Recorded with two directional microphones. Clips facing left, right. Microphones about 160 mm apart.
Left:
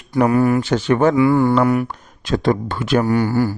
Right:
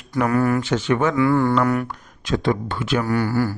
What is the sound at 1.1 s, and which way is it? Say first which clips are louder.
Speech: left 3 dB; 20° left (ahead or behind).